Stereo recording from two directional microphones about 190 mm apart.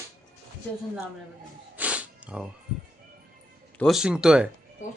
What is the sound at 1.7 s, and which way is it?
Music, 5° right (ahead or behind).